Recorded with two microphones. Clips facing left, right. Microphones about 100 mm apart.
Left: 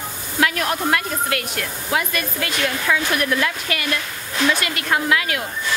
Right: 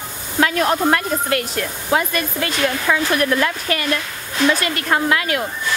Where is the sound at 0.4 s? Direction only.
35° right (ahead or behind).